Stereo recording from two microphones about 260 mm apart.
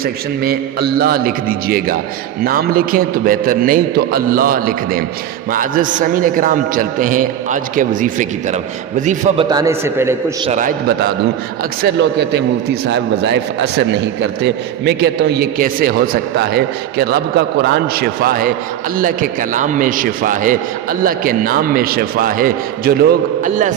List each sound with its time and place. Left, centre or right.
0.0 s a man's voice: right
9.5 s a man's voice: centre
11.8 s a man's voice: right